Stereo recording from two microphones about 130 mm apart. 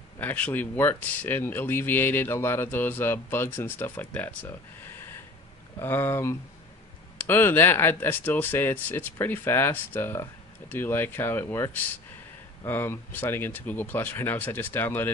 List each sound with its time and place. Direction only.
0.2 s speech: 15° left (ahead or behind)
4.9 s a sound: 15° left (ahead or behind)
5.8 s speech: 15° left (ahead or behind)